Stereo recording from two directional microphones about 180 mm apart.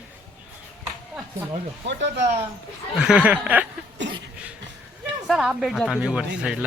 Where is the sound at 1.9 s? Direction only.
80° right.